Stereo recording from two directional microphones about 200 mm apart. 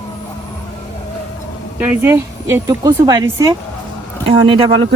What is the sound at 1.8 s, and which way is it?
Speech, 10° right (ahead or behind).